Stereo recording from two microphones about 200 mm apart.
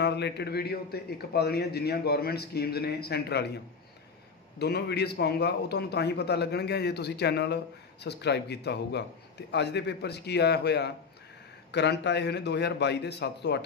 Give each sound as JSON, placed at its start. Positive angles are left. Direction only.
{"t": 0.0, "sound": "a man's voice", "side_deg": 55}